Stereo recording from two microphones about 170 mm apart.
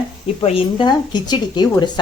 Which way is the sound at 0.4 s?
30° left (ahead or behind).